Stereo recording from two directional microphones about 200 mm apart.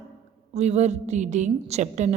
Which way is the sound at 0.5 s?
35° right (ahead or behind).